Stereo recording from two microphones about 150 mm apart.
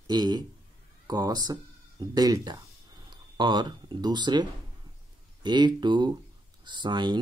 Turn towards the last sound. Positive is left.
turn(degrees=-30)  # may be behind; listen again after turning